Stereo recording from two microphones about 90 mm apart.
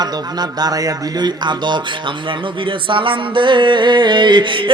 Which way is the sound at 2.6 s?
70° right (ahead or behind).